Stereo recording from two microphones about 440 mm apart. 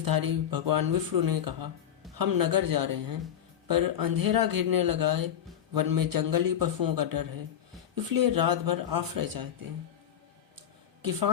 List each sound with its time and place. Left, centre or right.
0.0 s speech: right